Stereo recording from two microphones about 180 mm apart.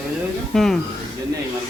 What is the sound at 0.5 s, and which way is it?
Speech, centre (ahead or behind).